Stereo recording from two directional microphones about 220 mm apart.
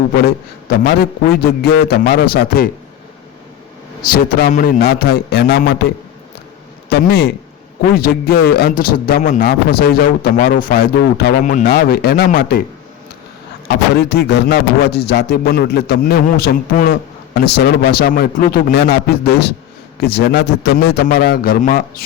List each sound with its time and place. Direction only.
0.2 s speech: 45° left (ahead or behind)
4.2 s speech: 40° left (ahead or behind)
6.9 s speech: 45° left (ahead or behind)
13.7 s speech: 50° left (ahead or behind)